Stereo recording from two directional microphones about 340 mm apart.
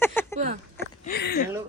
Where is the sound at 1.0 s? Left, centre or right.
Left.